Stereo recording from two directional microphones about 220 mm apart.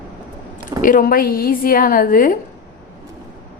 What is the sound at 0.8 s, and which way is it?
Speech, 40° left (ahead or behind).